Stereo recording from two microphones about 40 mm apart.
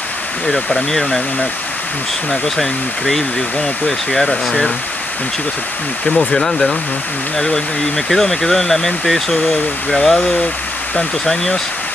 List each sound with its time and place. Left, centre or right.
0.5 s speech: centre
2.4 s speech: centre
6.0 s speech: centre
11.2 s speech: centre